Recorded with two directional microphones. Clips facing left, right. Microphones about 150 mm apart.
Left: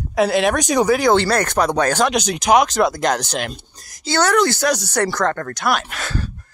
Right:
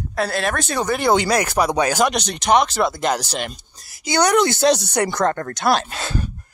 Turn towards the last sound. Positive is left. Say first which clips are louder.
# right 1 dB
turn(degrees=-25)  # may be behind; listen again after turning